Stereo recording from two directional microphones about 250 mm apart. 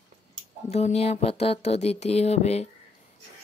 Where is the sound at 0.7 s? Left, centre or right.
Left.